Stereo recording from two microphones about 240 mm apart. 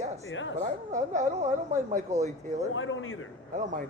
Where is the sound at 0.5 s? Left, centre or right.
Right.